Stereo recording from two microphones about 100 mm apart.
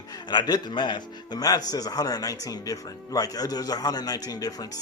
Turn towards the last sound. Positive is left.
turn(degrees=40)  # may be behind; listen again after turning